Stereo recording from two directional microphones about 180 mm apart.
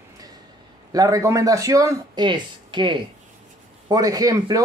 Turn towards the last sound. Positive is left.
turn(degrees=-20)  # may be behind; listen again after turning